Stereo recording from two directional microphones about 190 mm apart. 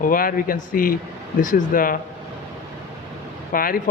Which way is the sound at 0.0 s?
45° left (ahead or behind).